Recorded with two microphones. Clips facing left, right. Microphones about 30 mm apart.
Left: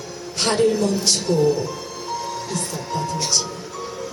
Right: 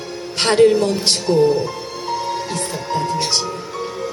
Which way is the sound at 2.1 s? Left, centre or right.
Right.